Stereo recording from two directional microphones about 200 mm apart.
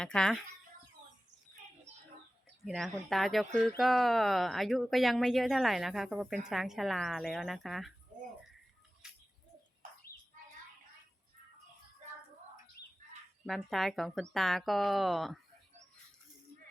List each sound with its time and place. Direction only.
0.0 s speech: 5° left (ahead or behind)
2.6 s speech: centre (ahead or behind)
9.0 s a sound: 5° right (ahead or behind)
13.4 s speech: centre (ahead or behind)